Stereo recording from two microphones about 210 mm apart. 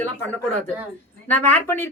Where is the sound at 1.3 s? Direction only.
10° left (ahead or behind).